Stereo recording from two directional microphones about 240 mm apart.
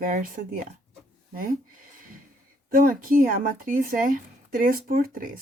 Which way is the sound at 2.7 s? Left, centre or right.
Right.